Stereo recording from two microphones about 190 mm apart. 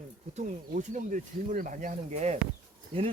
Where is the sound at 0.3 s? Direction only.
40° right (ahead or behind).